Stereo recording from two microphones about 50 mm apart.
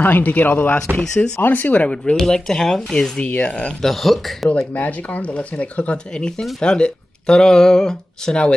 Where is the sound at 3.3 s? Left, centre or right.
Left.